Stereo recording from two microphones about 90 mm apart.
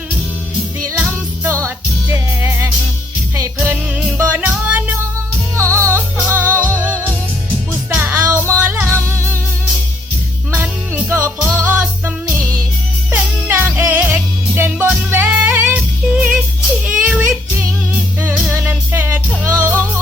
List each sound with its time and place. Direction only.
2.4 s music: 20° right (ahead or behind)
5.5 s music: 30° right (ahead or behind)
7.7 s music: 20° right (ahead or behind)
10.5 s music: 20° right (ahead or behind)